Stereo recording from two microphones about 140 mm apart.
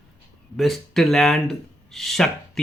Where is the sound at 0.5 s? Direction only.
Centre (ahead or behind).